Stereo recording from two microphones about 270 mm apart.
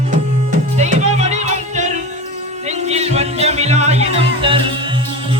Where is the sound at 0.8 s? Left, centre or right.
Right.